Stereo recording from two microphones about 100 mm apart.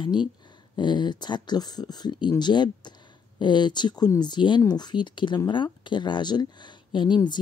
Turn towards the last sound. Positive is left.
turn(degrees=50)  # may be behind; listen again after turning